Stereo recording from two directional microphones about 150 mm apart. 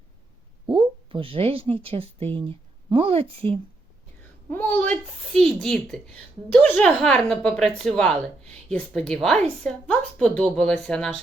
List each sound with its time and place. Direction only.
0.7 s speech: 35° right (ahead or behind)
4.5 s a woman's voice: 10° left (ahead or behind)